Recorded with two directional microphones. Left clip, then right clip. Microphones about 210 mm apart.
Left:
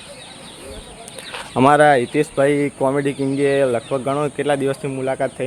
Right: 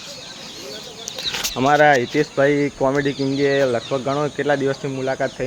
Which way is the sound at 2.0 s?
10° left (ahead or behind).